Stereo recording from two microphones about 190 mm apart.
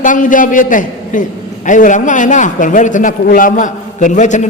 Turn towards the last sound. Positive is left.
turn(degrees=40)  # may be behind; listen again after turning